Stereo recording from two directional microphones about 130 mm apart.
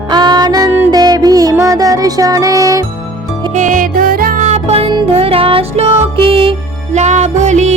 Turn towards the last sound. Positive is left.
turn(degrees=-65)  # may be behind; listen again after turning